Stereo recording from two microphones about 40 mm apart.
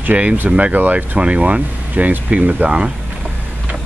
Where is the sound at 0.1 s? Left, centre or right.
Right.